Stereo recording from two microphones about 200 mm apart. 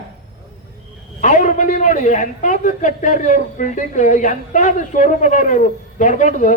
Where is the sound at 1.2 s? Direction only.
40° left (ahead or behind).